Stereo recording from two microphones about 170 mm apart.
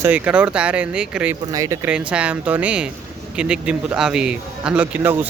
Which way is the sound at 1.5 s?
20° right (ahead or behind).